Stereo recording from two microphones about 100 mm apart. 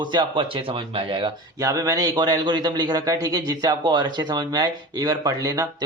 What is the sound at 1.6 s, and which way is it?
A man's voice, 35° right (ahead or behind).